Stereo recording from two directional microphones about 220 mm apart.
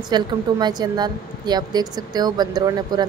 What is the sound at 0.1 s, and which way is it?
A woman's voice, 20° right (ahead or behind).